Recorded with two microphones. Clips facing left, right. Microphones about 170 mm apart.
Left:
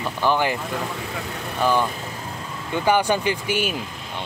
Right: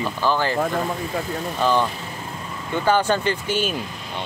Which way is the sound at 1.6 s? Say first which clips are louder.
Even; 10° left (ahead or behind).